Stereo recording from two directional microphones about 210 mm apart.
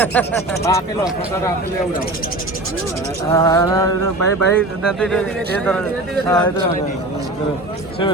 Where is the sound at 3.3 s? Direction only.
15° left (ahead or behind).